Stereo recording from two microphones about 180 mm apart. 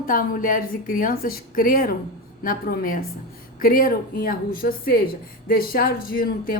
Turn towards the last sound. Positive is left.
turn(degrees=55)  # may be behind; listen again after turning